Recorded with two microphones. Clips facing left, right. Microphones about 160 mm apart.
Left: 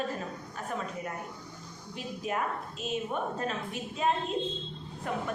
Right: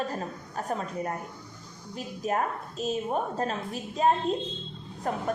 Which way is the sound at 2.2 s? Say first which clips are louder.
Right 4 dB; 40° right (ahead or behind).